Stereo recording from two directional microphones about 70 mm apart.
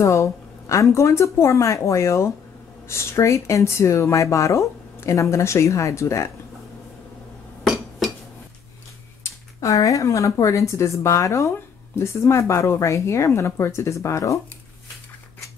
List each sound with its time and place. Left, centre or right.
0.0 s speech: left
7.6 s dishes: centre
9.2 s speech: left